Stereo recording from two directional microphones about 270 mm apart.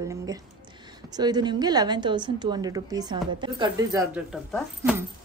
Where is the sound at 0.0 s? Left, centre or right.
Centre.